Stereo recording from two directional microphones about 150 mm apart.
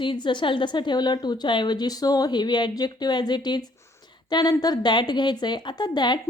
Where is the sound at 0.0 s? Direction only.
35° left (ahead or behind).